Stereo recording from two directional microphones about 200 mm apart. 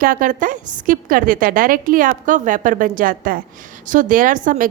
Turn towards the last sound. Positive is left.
turn(degrees=-40)  # may be behind; listen again after turning